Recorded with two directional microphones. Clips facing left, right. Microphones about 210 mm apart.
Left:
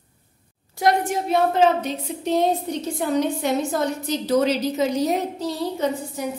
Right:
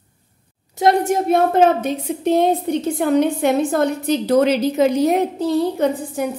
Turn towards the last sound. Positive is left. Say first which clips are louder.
# right 5 dB
turn(degrees=-55)  # may be behind; listen again after turning